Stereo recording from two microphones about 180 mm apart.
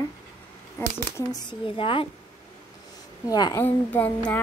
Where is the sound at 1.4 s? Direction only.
25° left (ahead or behind).